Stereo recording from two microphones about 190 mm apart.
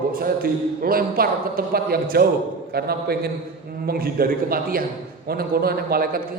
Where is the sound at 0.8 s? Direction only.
50° right (ahead or behind).